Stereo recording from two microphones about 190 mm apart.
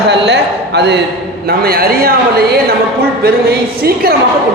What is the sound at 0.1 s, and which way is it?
A man's voice, 60° right (ahead or behind).